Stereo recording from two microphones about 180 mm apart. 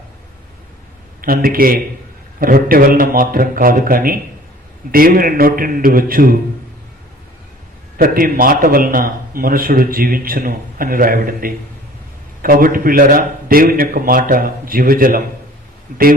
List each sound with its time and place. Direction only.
1.2 s a man's voice: 55° right (ahead or behind)
7.9 s a man's voice: 55° right (ahead or behind)